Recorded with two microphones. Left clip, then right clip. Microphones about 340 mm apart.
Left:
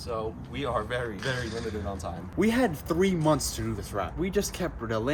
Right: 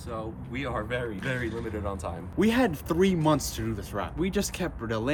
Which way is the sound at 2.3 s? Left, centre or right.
Centre.